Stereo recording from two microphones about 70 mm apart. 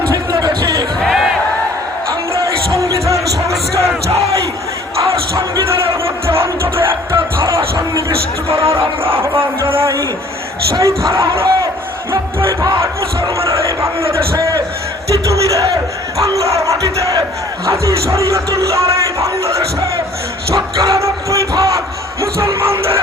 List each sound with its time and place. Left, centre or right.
0.1 s a sound: right
0.9 s a sound: centre
6.2 s music: right
7.4 s music: right
8.7 s speech: right
10.8 s music: right
12.8 s music: right
16.1 s music: right
20.6 s music: right
21.5 s a sound: right
22.2 s music: right